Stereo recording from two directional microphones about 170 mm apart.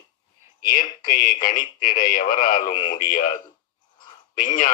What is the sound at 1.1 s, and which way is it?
Speech, 55° left (ahead or behind).